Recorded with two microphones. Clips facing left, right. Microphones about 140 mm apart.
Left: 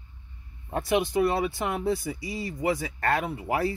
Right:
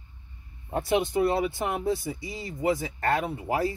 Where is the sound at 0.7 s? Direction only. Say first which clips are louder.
Even; 25° right (ahead or behind).